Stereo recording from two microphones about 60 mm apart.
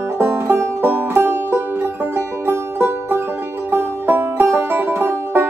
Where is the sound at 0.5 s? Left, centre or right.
Right.